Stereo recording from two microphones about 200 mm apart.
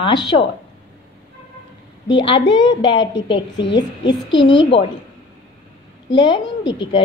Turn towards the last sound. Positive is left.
turn(degrees=25)  # may be behind; listen again after turning